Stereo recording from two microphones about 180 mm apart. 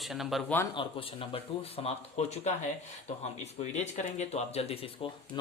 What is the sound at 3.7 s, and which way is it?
Speech, 40° left (ahead or behind).